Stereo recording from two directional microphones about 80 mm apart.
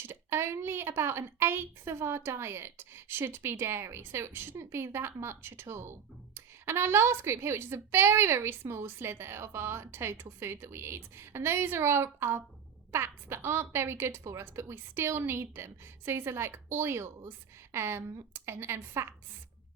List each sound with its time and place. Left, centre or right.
0.0 s speech: right